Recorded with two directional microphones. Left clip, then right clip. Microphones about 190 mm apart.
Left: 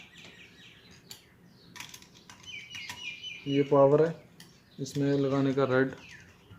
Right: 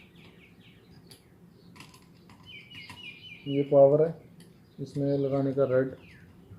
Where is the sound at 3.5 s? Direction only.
45° left (ahead or behind).